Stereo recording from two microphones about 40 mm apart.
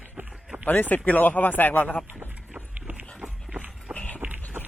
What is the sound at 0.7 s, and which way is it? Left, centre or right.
Speech, left.